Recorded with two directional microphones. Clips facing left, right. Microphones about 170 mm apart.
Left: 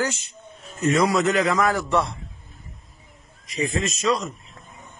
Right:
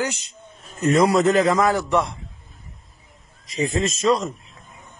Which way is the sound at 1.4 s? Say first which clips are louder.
Right 3 dB; 25° right (ahead or behind).